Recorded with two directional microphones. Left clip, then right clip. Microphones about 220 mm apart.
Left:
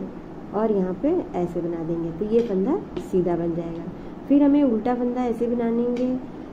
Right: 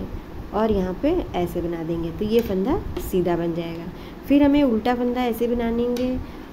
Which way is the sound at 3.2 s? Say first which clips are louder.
Right 1 dB; 30° right (ahead or behind).